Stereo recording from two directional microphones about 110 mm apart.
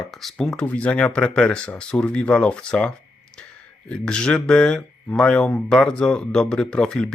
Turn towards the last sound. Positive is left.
turn(degrees=10)  # may be behind; listen again after turning